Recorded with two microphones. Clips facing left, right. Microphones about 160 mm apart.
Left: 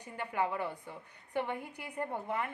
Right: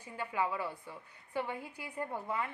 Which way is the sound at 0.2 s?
55° left (ahead or behind).